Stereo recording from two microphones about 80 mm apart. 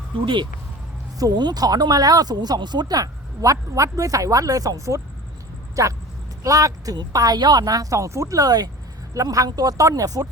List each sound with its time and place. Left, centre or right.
1.2 s speech: right
9.1 s speech: right